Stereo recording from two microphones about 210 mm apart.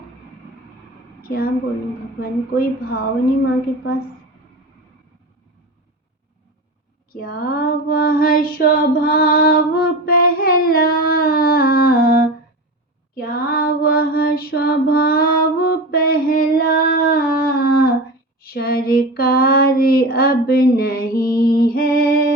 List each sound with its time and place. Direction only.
1.2 s a woman's voice: 45° left (ahead or behind)
2.2 s child singing: 45° left (ahead or behind)
7.1 s child singing: 45° left (ahead or behind)
8.5 s female singing: 40° left (ahead or behind)
13.1 s female singing: 45° left (ahead or behind)
18.4 s child singing: 45° left (ahead or behind)